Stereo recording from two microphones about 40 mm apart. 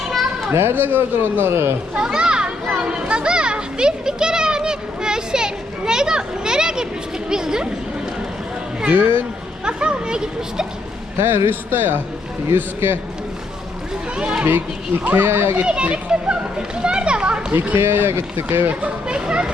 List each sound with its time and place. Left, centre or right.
0.5 s a man's voice: right
2.0 s children playing: right
7.3 s a sound: centre
8.9 s speech: right
9.6 s speech: right
11.2 s speech: right
14.4 s a man's voice: right
15.6 s a child's voice: right
17.7 s a man's voice: right
18.8 s speech: right